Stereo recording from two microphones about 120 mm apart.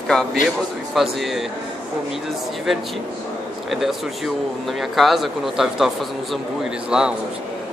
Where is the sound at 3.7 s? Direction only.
Centre (ahead or behind).